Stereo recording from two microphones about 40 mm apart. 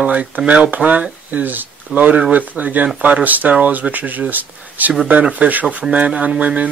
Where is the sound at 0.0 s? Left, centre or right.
Right.